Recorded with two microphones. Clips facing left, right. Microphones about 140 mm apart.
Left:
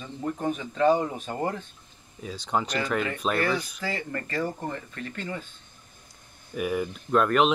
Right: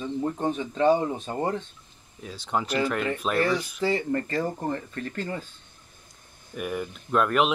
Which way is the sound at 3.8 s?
30° right (ahead or behind).